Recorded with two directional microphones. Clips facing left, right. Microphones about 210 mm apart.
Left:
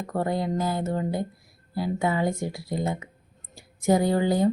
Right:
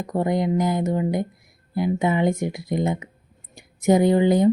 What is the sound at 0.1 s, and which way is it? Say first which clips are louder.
Speech: right 5 dB; 15° right (ahead or behind).